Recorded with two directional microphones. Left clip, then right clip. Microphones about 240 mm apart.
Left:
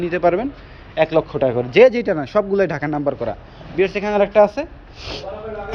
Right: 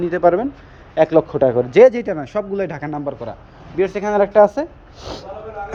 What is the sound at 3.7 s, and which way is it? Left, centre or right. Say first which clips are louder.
Speech: even; right.